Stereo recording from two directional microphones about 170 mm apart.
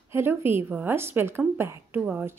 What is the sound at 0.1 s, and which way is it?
Speech, 15° right (ahead or behind).